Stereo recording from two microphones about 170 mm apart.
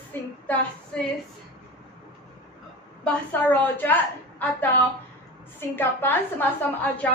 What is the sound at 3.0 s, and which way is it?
Speech, 10° left (ahead or behind).